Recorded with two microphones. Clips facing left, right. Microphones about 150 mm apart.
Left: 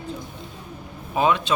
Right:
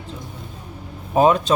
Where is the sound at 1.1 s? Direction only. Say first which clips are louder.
Right 5 dB; 40° right (ahead or behind).